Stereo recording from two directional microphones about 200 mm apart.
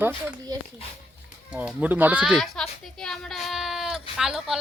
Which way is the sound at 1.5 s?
5° right (ahead or behind).